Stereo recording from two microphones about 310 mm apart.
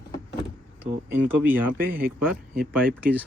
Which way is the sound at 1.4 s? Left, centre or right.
Centre.